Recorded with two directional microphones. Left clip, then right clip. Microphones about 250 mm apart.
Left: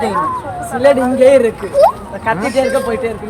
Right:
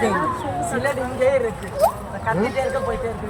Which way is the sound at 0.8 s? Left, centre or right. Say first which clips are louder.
Left 14 dB; left.